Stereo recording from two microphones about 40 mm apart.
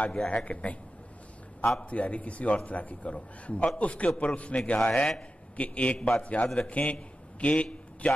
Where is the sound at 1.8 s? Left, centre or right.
Left.